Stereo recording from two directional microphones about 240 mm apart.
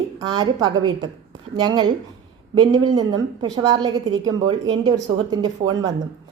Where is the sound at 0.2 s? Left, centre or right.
Centre.